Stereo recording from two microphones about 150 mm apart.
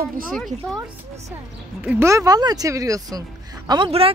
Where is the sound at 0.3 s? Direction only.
Centre (ahead or behind).